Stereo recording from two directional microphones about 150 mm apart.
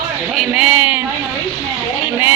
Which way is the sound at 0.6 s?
10° right (ahead or behind).